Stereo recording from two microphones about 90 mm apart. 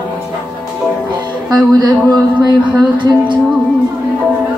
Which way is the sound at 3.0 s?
60° right (ahead or behind).